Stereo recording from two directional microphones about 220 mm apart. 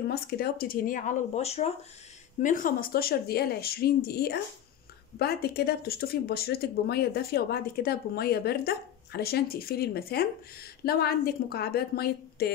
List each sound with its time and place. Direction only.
0.1 s speech: 45° left (ahead or behind)